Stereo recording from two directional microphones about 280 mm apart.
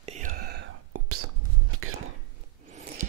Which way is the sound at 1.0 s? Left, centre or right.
Right.